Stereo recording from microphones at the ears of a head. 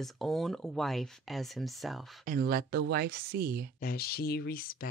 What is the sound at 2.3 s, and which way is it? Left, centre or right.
Speech, right.